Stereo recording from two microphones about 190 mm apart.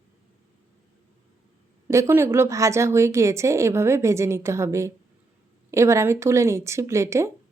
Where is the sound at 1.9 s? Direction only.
15° right (ahead or behind).